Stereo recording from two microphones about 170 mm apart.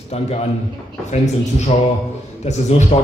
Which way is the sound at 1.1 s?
40° left (ahead or behind).